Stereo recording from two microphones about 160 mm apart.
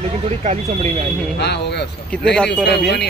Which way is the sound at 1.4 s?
90° left.